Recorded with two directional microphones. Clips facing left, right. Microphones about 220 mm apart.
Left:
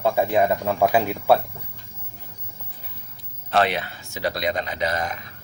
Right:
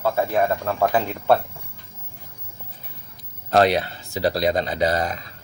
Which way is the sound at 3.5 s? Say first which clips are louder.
Right 4 dB; 40° right (ahead or behind).